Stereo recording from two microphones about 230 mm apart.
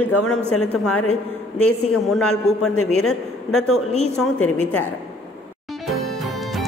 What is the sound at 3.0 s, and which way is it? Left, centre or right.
Speech, left.